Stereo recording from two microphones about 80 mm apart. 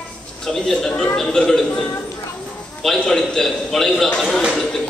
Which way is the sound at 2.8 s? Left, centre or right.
Centre.